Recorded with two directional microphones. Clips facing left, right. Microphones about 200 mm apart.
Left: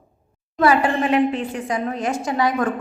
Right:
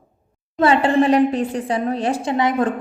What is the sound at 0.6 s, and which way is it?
A woman's voice, 30° right (ahead or behind).